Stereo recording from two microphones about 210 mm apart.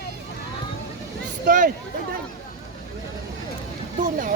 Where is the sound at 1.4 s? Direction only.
40° right (ahead or behind).